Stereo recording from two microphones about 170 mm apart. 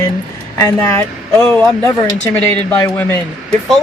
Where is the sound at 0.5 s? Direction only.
15° left (ahead or behind).